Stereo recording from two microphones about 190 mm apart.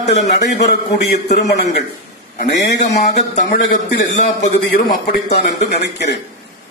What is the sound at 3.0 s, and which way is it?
A man's voice, 35° left (ahead or behind).